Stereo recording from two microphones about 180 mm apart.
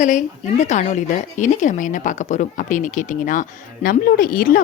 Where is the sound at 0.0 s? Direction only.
45° left (ahead or behind).